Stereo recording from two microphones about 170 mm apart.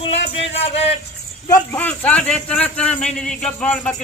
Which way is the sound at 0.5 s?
35° left (ahead or behind).